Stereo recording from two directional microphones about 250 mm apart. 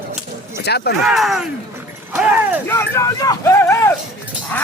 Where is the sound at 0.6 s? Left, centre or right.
Left.